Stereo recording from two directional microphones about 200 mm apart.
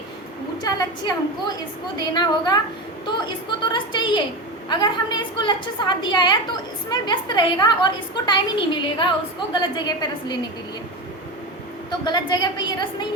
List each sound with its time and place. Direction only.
0.6 s a woman's voice: 20° left (ahead or behind)
11.9 s a woman's voice: 20° left (ahead or behind)